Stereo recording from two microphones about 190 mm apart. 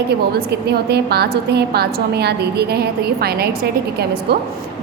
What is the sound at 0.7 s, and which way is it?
A woman's voice, 60° right (ahead or behind).